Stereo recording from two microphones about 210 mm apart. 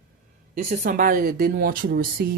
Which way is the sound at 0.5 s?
40° right (ahead or behind).